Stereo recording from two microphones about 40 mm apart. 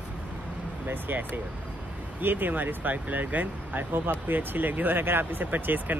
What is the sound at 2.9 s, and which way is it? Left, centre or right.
Speech, right.